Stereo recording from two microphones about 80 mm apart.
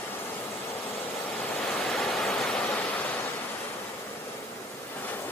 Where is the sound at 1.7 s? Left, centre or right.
Centre.